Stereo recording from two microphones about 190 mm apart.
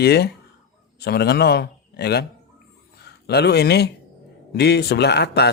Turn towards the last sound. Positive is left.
turn(degrees=60)  # may be behind; listen again after turning